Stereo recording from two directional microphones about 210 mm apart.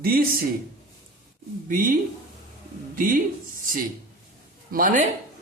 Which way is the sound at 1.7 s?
40° right (ahead or behind).